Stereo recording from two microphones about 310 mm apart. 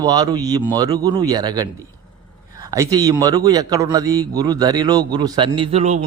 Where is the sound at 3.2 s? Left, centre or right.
Centre.